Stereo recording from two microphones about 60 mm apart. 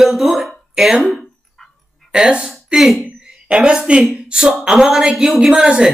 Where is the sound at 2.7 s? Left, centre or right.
Centre.